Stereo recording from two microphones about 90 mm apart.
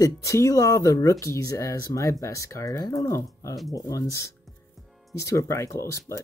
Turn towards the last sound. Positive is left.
turn(degrees=35)  # may be behind; listen again after turning